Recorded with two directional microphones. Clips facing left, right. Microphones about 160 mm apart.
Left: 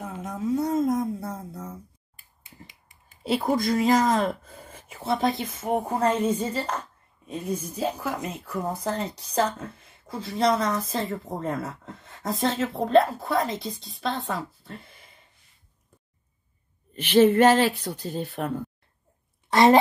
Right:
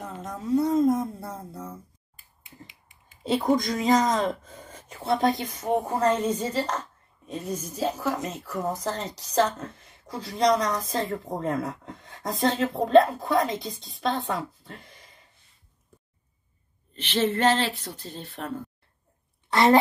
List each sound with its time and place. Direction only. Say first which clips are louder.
0.0 s a sound: left 4 dB; 5° left (ahead or behind)
3.3 s speech: even; 10° left (ahead or behind)
16.9 s speech: left 8 dB; 10° left (ahead or behind)
19.5 s a child's voice: left 2 dB; 20° left (ahead or behind)